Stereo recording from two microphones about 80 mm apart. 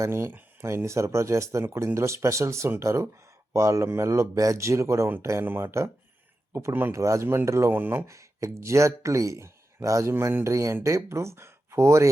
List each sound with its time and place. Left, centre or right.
0.0 s speech: right
7.7 s speech: right
8.0 s speech: right